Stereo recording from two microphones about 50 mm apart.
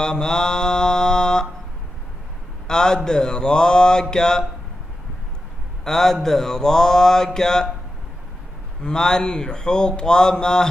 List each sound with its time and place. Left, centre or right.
0.0 s mantra: centre
2.7 s speech: centre
5.9 s speech: centre
8.8 s speech: centre